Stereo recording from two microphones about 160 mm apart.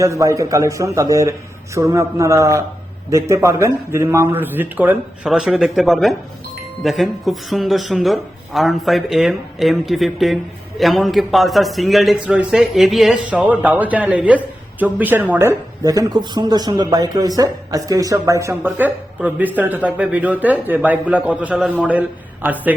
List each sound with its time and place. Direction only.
0.0 s a man's voice: 20° right (ahead or behind)